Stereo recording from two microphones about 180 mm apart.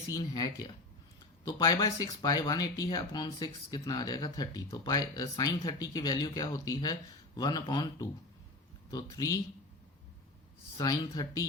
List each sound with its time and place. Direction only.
0.1 s speech: 20° left (ahead or behind)
10.8 s speech: 20° left (ahead or behind)